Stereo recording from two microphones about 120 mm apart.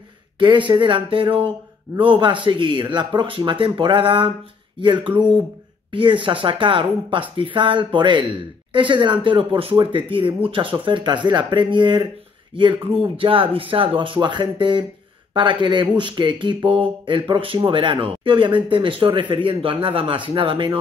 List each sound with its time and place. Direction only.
0.4 s speech: 40° right (ahead or behind)